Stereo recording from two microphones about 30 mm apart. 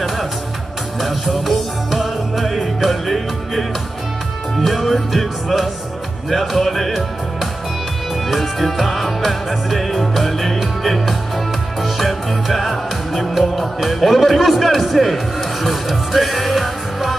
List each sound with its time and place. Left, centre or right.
1.0 s music: centre
2.4 s music: centre